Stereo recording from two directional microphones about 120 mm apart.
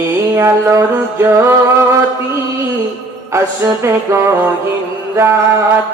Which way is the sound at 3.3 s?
25° right (ahead or behind).